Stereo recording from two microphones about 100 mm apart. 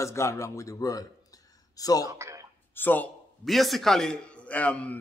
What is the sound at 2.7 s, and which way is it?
Speech, 20° left (ahead or behind).